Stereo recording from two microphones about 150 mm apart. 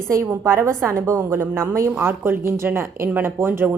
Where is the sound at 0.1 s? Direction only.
15° right (ahead or behind).